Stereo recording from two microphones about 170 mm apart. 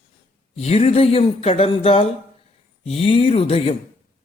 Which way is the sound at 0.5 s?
40° left (ahead or behind).